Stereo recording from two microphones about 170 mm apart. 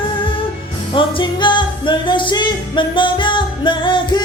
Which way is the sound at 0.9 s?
30° left (ahead or behind).